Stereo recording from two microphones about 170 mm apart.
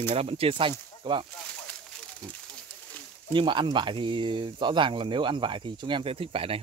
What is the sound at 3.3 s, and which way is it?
Speech, 30° right (ahead or behind).